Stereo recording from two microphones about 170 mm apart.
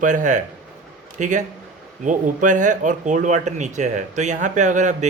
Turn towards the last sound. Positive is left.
turn(degrees=-45)  # may be behind; listen again after turning